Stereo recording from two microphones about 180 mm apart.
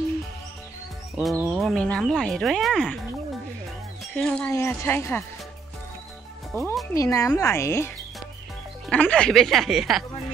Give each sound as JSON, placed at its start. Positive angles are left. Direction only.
{"t": 1.2, "sound": "speech", "side_deg": 0}
{"t": 4.0, "sound": "speech", "side_deg": 5}
{"t": 6.5, "sound": "speech", "side_deg": 15}